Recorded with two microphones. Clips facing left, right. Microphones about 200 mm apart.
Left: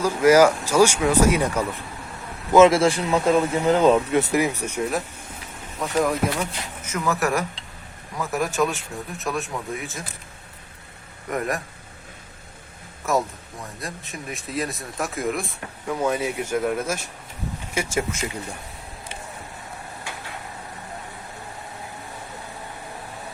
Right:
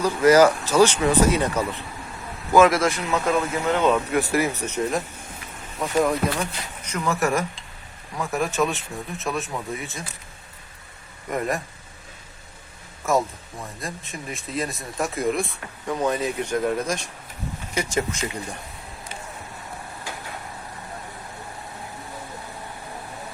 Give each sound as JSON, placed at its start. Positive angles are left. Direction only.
{"t": 0.0, "sound": "speech", "side_deg": 10}
{"t": 2.5, "sound": "speech", "side_deg": 25}
{"t": 11.3, "sound": "speech", "side_deg": 0}
{"t": 13.0, "sound": "speech", "side_deg": 0}